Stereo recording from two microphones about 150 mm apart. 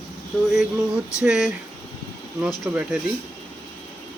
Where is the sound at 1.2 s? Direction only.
5° right (ahead or behind).